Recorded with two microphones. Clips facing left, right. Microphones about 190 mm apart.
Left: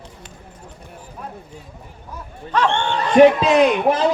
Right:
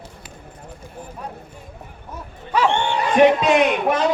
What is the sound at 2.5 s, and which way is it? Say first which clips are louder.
Bow-wow: even; 10° right (ahead or behind).